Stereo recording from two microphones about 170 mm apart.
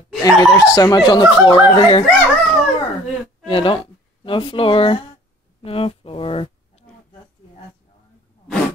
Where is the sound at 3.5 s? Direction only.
30° left (ahead or behind).